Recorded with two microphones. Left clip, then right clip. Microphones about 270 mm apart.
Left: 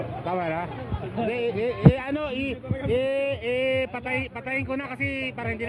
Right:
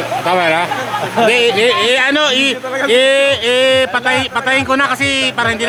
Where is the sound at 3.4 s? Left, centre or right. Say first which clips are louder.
Right 13 dB; right.